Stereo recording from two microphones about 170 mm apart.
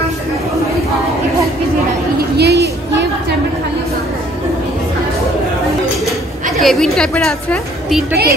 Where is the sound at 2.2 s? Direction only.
75° right (ahead or behind).